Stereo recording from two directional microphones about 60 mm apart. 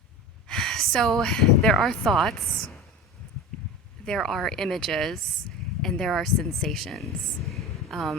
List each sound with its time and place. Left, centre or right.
0.4 s speech: centre
2.5 s a woman's voice: centre
4.0 s speech: centre